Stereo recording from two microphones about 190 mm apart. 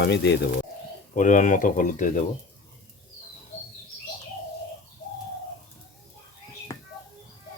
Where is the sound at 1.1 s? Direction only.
40° left (ahead or behind).